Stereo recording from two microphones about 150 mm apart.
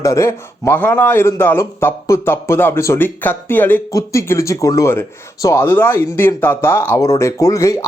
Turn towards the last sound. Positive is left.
turn(degrees=20)  # may be behind; listen again after turning